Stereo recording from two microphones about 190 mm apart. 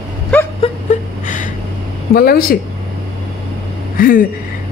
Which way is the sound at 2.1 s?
50° left (ahead or behind).